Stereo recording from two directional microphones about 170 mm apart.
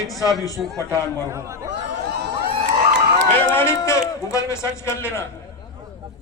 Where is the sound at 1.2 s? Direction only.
15° right (ahead or behind).